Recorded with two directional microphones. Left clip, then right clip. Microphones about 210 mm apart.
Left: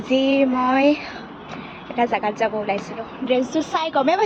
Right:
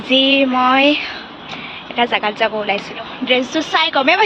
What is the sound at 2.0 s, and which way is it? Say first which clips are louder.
Speech: right 4 dB; centre (ahead or behind).